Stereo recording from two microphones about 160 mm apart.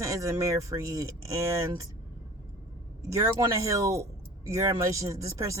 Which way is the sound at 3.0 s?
20° right (ahead or behind).